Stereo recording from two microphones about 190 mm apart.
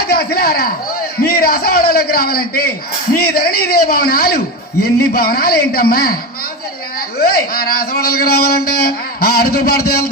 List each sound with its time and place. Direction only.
0.0 s a man's voice: 55° left (ahead or behind)
7.2 s a man's voice: 55° left (ahead or behind)